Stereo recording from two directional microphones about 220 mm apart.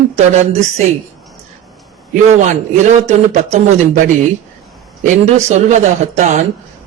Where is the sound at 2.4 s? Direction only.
30° right (ahead or behind).